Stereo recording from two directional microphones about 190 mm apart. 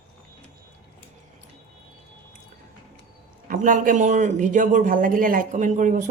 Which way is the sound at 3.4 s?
45° right (ahead or behind).